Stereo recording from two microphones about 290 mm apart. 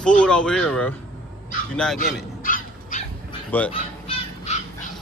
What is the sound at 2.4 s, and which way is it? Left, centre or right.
Dog, left.